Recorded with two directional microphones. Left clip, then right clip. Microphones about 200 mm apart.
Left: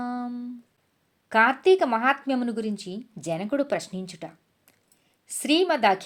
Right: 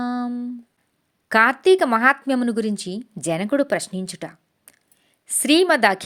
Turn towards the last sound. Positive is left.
turn(degrees=-25)  # may be behind; listen again after turning